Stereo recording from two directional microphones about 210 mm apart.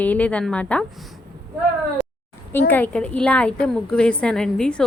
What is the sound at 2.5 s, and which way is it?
A woman's voice, 10° left (ahead or behind).